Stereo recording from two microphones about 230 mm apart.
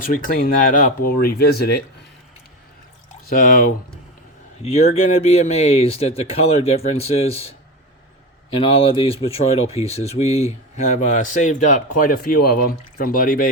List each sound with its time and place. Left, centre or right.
0.0 s speech: left
3.2 s speech: left